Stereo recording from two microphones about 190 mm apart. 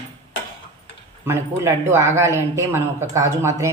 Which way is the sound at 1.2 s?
15° right (ahead or behind).